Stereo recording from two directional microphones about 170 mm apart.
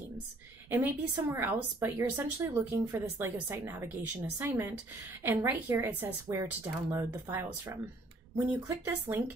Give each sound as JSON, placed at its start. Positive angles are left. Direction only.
{"t": 0.7, "sound": "a woman's voice", "side_deg": -10}